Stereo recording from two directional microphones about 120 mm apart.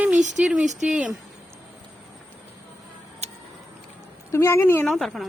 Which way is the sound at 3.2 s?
60° right (ahead or behind).